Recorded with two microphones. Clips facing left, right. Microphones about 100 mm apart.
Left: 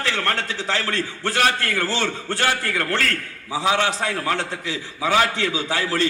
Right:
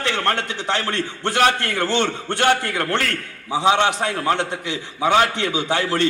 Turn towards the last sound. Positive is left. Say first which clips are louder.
# right 2 dB
turn(degrees=-20)  # may be behind; listen again after turning